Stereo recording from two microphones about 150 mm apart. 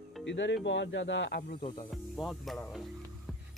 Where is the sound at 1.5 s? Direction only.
40° left (ahead or behind).